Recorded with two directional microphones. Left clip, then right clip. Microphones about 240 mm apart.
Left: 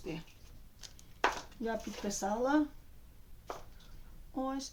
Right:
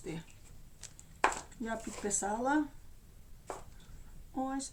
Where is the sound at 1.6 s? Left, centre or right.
Centre.